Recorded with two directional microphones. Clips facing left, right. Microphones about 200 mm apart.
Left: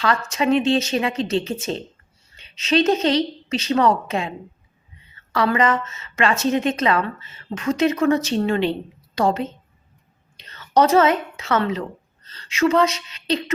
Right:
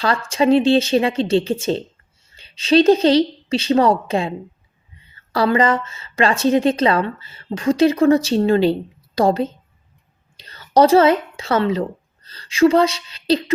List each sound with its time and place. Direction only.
0.0 s a woman's voice: 30° right (ahead or behind)